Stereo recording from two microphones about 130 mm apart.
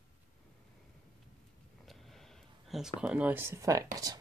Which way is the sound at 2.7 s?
5° right (ahead or behind).